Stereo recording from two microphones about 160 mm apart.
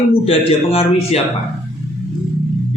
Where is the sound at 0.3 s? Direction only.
35° left (ahead or behind).